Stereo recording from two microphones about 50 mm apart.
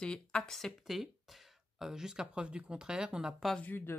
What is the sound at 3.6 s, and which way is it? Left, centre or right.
Speech, left.